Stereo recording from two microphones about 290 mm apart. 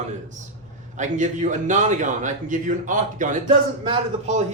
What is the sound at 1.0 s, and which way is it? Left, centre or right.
A man's voice, right.